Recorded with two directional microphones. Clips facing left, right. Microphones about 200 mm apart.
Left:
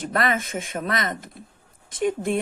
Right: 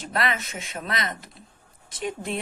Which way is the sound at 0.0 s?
50° left (ahead or behind).